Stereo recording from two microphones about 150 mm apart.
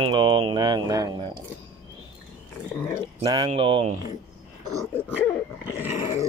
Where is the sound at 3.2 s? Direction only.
35° right (ahead or behind).